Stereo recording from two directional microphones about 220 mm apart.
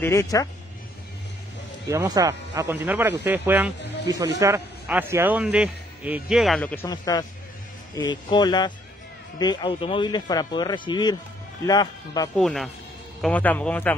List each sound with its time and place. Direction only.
0.0 s a man's voice: 15° left (ahead or behind)
1.9 s a man's voice: 15° right (ahead or behind); by 12.3 s 20° left (ahead or behind)
12.4 s a man's voice: centre (ahead or behind)